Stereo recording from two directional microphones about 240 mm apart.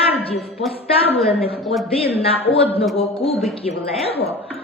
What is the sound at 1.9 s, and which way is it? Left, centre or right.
Speech, left.